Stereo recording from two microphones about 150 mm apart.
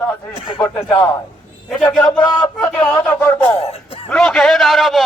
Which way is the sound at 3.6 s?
40° left (ahead or behind).